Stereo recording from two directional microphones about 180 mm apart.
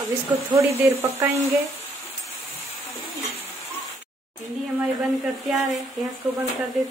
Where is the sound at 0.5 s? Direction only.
15° right (ahead or behind).